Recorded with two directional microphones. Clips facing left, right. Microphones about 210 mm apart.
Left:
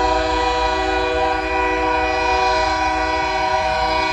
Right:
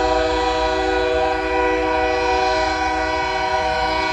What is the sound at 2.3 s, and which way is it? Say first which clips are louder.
Train: even; 20° right (ahead or behind).